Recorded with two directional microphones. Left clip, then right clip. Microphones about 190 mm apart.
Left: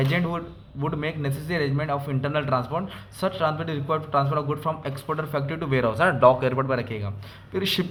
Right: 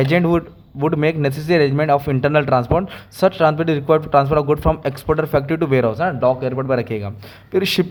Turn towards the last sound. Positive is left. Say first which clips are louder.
# right 8 dB
turn(degrees=-50)  # may be behind; listen again after turning